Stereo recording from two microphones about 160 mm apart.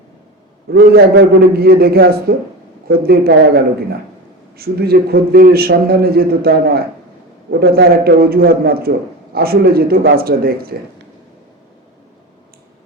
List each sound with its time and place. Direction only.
0.7 s a man's voice: 90° right; by 10.7 s 70° right (ahead or behind)